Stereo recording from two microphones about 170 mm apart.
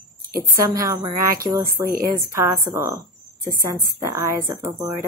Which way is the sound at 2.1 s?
15° right (ahead or behind).